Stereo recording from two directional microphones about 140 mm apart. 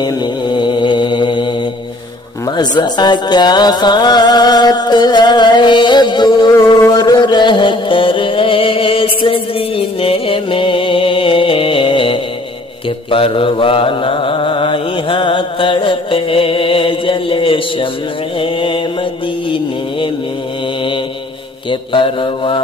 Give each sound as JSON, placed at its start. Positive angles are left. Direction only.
{"t": 0.0, "sound": "mantra", "side_deg": 30}
{"t": 2.4, "sound": "music", "side_deg": 30}
{"t": 13.1, "sound": "mantra", "side_deg": 40}
{"t": 18.4, "sound": "music", "side_deg": 40}
{"t": 21.6, "sound": "music", "side_deg": 35}